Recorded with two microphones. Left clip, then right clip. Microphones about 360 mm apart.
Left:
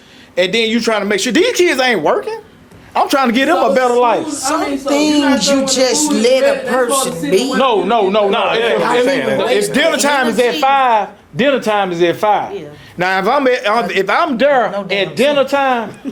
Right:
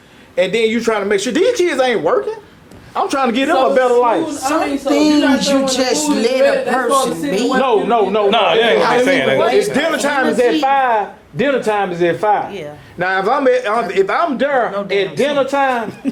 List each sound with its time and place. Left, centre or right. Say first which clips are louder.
0.3 s speech: left 1 dB; left
4.3 s speech: even; left
7.6 s speech: even; left
8.3 s a man's voice: right 2 dB; right
9.7 s speech: left 3 dB; left